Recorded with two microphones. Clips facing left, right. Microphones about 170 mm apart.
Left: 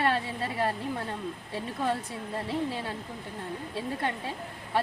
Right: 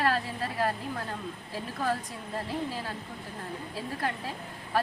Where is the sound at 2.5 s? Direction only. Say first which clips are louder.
Left 4 dB; 25° left (ahead or behind).